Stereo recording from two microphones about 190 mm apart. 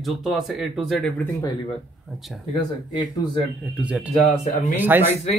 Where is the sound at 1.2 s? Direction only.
20° left (ahead or behind).